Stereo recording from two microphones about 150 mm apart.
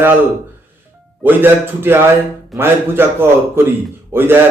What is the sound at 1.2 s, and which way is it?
A man's voice, 15° right (ahead or behind).